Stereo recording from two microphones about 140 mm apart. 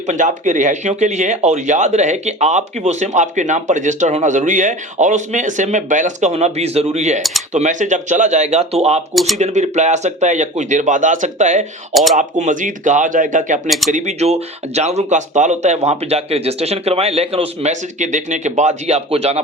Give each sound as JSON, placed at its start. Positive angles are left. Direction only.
{"t": 0.1, "sound": "speech", "side_deg": -60}
{"t": 7.2, "sound": "speech", "side_deg": 0}
{"t": 7.5, "sound": "speech", "side_deg": -60}
{"t": 9.1, "sound": "speech", "side_deg": 0}
{"t": 9.4, "sound": "a man's voice", "side_deg": -55}